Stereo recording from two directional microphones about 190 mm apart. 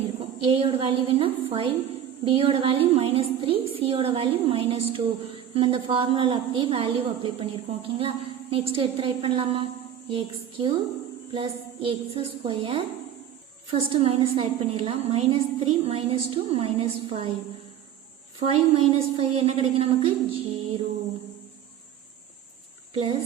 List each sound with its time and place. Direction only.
0.2 s a woman's voice: 30° right (ahead or behind)
18.3 s a woman's voice: 30° right (ahead or behind)